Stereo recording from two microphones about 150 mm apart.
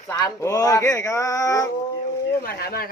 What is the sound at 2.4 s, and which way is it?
Speech, 90° left.